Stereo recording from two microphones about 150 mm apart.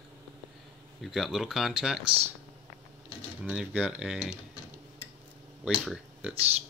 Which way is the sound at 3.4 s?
10° right (ahead or behind).